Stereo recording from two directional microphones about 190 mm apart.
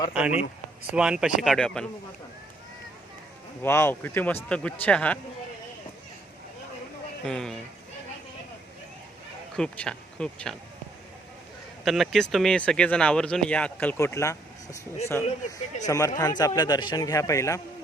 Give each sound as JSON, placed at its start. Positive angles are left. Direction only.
{"t": 0.1, "sound": "speech", "side_deg": -5}
{"t": 3.6, "sound": "a man's voice", "side_deg": 15}
{"t": 7.3, "sound": "speech", "side_deg": 5}
{"t": 9.6, "sound": "speech", "side_deg": 5}
{"t": 11.9, "sound": "a man's voice", "side_deg": 0}